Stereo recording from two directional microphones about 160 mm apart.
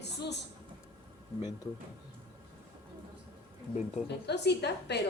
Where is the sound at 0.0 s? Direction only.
90° left.